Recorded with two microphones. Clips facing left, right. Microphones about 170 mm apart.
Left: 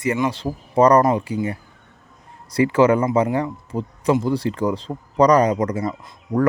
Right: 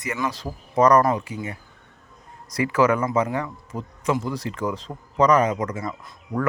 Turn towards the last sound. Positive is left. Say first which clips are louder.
# left 6 dB
turn(degrees=35)  # may be behind; listen again after turning